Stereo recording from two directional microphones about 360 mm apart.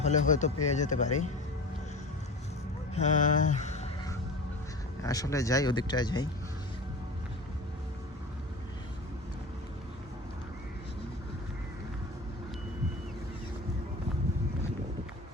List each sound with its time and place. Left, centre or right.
0.0 s speech: centre
2.9 s music: centre
5.0 s speech: centre